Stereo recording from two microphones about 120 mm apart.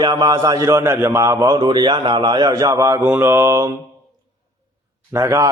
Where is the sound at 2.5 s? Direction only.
30° right (ahead or behind).